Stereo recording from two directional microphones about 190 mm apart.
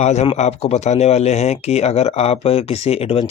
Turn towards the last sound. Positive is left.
turn(degrees=30)  # may be behind; listen again after turning